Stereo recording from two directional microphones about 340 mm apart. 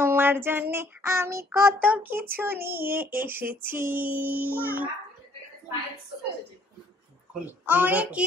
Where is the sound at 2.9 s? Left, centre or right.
Centre.